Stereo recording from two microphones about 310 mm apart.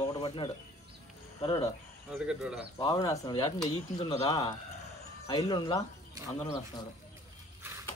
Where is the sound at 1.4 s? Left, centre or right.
Centre.